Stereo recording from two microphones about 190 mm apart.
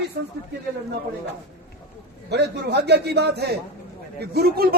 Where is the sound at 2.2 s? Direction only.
60° right (ahead or behind).